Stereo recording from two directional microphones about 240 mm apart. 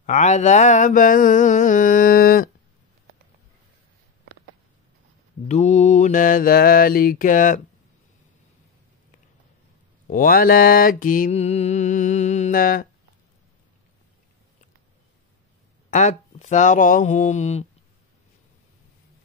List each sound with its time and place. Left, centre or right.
0.0 s mantra: left
5.5 s mantra: left
10.0 s mantra: left
15.9 s speech: left